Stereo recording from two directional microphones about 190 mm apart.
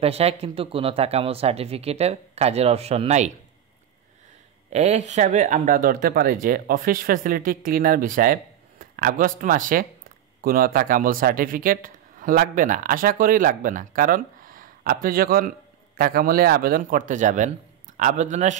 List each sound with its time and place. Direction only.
0.0 s speech: 30° right (ahead or behind)
4.7 s speech: 35° right (ahead or behind)